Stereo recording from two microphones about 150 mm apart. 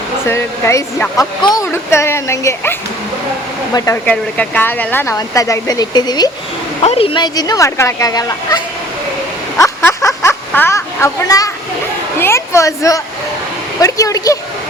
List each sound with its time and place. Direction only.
0.3 s speech: 20° left (ahead or behind)
3.8 s speech: 20° left (ahead or behind)
4.0 s speech: 10° left (ahead or behind); by 6.3 s 25° left (ahead or behind)
6.8 s speech: 40° left (ahead or behind); by 14.3 s 25° left (ahead or behind)